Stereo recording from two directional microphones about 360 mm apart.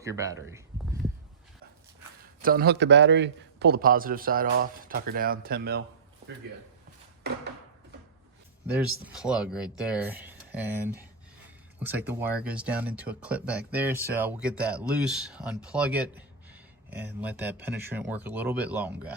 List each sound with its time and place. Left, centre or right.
0.0 s speech: centre
2.4 s a man's voice: right
7.3 s a sound: right
8.6 s speech: centre